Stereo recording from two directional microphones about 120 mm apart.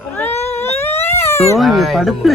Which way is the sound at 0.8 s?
20° left (ahead or behind).